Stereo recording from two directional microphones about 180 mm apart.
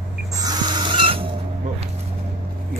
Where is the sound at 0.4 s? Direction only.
25° right (ahead or behind).